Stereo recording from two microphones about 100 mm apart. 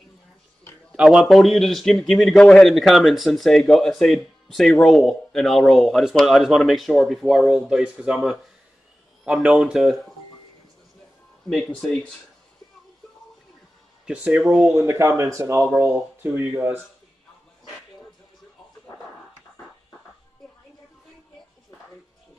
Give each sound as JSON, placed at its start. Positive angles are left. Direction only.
{"t": 0.9, "sound": "a man's voice", "side_deg": -5}
{"t": 11.4, "sound": "speech", "side_deg": 5}
{"t": 14.0, "sound": "speech", "side_deg": -10}
{"t": 14.9, "sound": "speech", "side_deg": -30}